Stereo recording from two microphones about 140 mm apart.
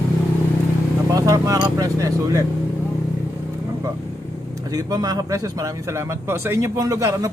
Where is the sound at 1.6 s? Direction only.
25° right (ahead or behind).